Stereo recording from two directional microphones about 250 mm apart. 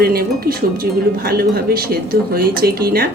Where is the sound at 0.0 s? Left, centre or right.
Right.